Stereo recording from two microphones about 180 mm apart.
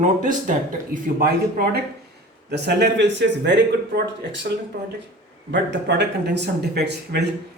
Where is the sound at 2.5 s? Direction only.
70° right (ahead or behind).